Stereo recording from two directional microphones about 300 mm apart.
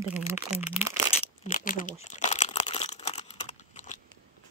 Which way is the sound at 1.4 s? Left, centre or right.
Left.